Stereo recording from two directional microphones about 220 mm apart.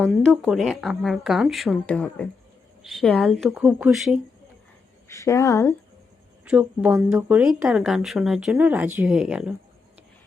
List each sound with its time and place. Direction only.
0.0 s a woman's voice: centre (ahead or behind)
5.0 s a woman's voice: 15° left (ahead or behind)
6.4 s a woman's voice: 5° right (ahead or behind)